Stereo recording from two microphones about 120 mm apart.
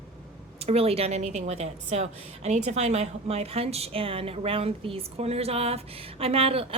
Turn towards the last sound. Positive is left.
turn(degrees=-55)  # may be behind; listen again after turning